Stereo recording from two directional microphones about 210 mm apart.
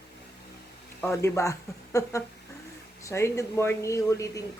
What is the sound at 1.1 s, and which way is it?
Speech, 15° left (ahead or behind).